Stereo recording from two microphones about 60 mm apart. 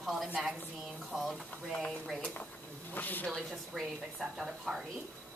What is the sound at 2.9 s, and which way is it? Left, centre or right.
Speech, left.